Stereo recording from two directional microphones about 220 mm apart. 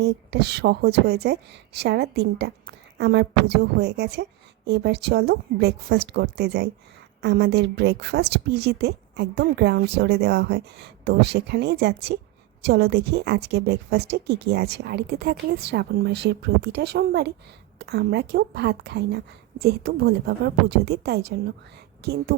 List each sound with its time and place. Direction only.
0.0 s a woman's voice: 50° right (ahead or behind)